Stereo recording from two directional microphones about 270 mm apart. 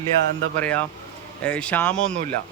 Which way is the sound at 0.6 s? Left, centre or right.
Centre.